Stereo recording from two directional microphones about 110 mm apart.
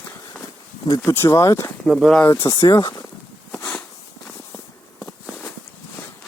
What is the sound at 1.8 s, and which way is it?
Speech, centre (ahead or behind).